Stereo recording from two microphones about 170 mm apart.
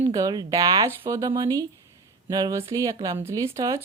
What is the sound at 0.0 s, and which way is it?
Speech, 20° right (ahead or behind).